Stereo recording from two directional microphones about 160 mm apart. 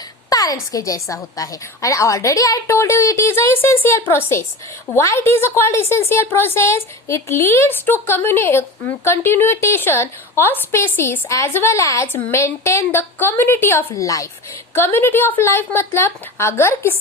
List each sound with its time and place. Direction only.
0.3 s a woman's voice: 20° left (ahead or behind)